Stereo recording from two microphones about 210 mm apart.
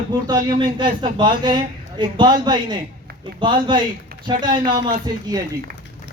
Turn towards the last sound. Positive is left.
turn(degrees=-20)  # may be behind; listen again after turning